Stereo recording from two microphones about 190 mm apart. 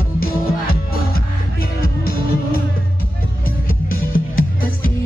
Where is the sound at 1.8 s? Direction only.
50° left (ahead or behind).